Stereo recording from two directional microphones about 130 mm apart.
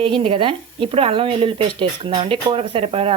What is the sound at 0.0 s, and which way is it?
Speech, 45° right (ahead or behind).